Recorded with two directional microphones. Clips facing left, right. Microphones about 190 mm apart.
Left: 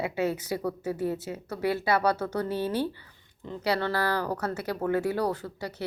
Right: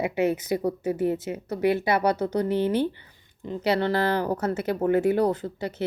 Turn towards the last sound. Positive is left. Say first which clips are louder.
# right 5 dB
turn(degrees=-20)  # may be behind; listen again after turning